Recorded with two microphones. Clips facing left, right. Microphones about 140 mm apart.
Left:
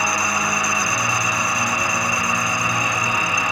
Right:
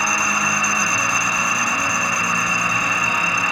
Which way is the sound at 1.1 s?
5° left (ahead or behind).